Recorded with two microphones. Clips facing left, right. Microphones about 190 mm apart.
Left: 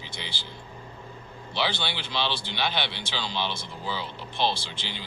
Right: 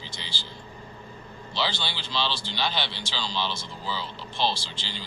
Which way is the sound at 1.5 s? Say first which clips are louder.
Left 1 dB; 60° left (ahead or behind).